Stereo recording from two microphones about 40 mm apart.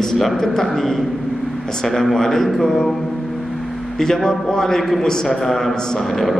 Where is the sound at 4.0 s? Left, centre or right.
Centre.